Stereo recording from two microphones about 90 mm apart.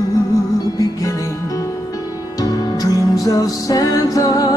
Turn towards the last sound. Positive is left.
turn(degrees=40)  # may be behind; listen again after turning